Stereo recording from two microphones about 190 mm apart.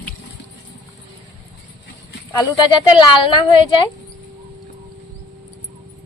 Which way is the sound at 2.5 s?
20° left (ahead or behind).